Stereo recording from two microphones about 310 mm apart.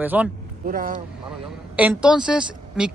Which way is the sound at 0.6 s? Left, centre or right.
Right.